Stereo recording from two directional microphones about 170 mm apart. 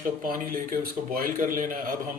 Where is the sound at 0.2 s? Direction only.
55° right (ahead or behind).